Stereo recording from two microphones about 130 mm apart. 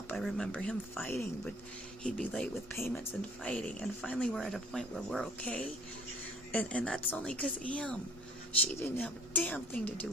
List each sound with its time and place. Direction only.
0.2 s speech: 5° left (ahead or behind)
1.0 s speech: 15° left (ahead or behind)
2.0 s speech: 5° left (ahead or behind)
2.7 s speech: 15° left (ahead or behind)